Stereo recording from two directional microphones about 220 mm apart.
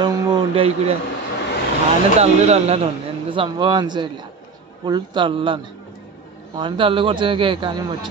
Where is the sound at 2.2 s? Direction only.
30° right (ahead or behind).